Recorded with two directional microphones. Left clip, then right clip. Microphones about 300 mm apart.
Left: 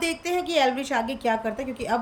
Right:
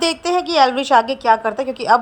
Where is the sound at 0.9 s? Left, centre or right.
Right.